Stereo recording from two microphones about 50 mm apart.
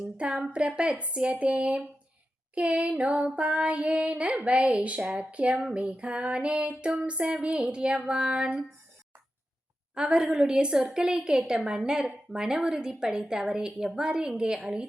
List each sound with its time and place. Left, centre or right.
0.2 s female singing: centre
9.9 s a woman's voice: centre